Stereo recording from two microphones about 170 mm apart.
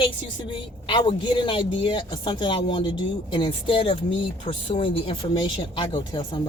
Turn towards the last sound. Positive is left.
turn(degrees=25)  # may be behind; listen again after turning